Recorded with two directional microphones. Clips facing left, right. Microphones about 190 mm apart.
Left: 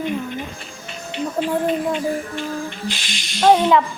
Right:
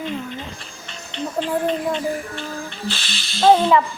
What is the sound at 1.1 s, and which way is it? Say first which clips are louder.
Speech: left 2 dB; 10° left (ahead or behind).